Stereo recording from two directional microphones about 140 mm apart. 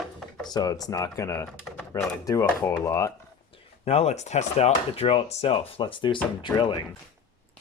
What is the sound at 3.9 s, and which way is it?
Speech, 50° left (ahead or behind).